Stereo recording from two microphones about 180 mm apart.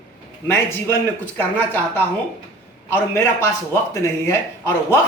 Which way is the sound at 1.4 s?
10° left (ahead or behind).